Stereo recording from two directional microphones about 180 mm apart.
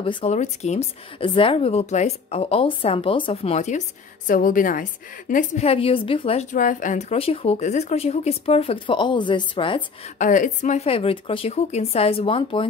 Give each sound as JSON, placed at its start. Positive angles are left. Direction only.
{"t": 0.0, "sound": "a woman's voice", "side_deg": 30}
{"t": 10.1, "sound": "a woman's voice", "side_deg": 45}